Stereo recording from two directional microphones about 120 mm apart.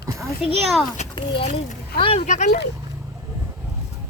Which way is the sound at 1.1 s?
45° left (ahead or behind).